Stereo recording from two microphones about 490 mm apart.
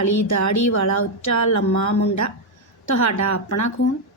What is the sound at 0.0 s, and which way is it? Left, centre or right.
Speech, left.